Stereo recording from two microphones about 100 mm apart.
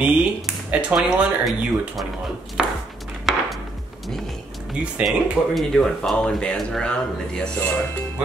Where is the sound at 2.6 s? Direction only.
5° right (ahead or behind).